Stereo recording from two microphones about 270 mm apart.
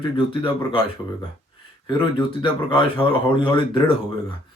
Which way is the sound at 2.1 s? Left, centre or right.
Centre.